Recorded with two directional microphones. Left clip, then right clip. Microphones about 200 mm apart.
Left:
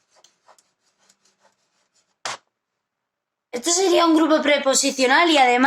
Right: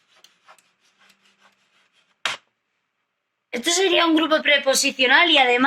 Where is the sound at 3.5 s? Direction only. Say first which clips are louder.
Even; 50° left (ahead or behind).